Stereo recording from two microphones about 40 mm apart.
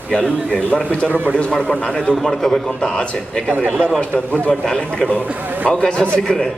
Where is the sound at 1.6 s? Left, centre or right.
Left.